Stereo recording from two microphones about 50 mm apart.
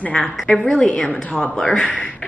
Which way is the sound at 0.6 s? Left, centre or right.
Centre.